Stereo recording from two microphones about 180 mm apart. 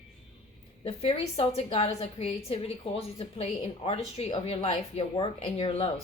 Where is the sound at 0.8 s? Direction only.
35° left (ahead or behind).